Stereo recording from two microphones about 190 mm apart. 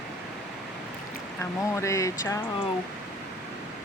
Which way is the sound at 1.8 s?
15° left (ahead or behind).